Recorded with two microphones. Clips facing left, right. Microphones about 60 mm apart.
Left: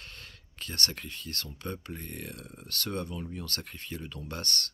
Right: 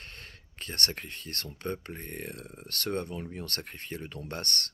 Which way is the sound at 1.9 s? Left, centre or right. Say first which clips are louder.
Right 1 dB; right.